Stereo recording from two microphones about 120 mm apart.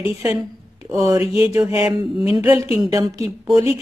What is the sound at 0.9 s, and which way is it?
Speech, 25° right (ahead or behind).